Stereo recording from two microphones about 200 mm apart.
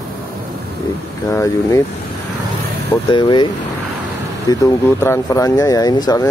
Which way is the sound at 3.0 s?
25° left (ahead or behind).